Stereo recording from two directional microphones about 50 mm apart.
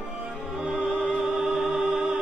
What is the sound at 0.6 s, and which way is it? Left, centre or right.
Opera, centre.